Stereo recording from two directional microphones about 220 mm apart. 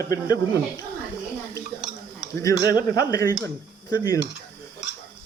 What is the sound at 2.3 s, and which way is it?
Speech, 15° left (ahead or behind).